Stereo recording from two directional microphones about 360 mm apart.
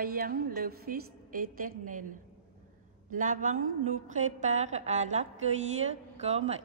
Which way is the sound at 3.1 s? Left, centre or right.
Right.